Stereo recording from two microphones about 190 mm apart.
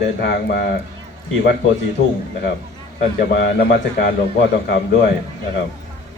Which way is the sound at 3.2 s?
60° left (ahead or behind).